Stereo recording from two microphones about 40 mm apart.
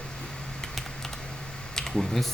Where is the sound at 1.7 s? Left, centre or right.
Centre.